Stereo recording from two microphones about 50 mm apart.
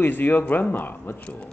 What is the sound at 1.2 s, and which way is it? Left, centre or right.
Speech, centre.